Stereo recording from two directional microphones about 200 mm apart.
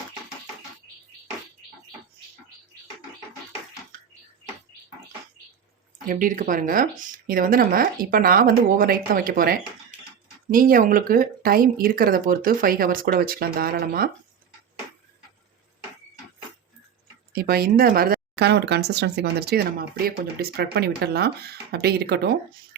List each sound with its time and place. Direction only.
6.1 s speech: 40° right (ahead or behind)
17.3 s speech: 50° right (ahead or behind)